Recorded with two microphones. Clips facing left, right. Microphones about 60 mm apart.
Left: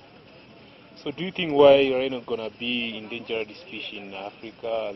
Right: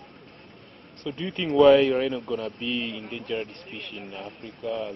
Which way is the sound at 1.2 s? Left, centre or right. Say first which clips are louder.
Even; left.